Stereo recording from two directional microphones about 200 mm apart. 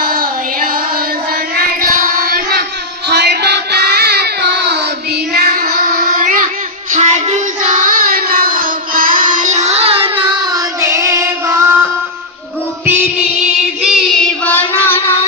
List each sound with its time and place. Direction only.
0.0 s child singing: 45° right (ahead or behind)
1.8 s child singing: 45° right (ahead or behind)
5.3 s child singing: 45° right (ahead or behind); by 10.2 s 25° right (ahead or behind)
10.5 s child singing: 15° right (ahead or behind)
12.8 s music: 10° right (ahead or behind)
13.8 s child singing: 5° left (ahead or behind)